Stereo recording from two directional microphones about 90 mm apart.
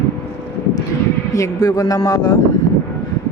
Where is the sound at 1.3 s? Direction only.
40° left (ahead or behind).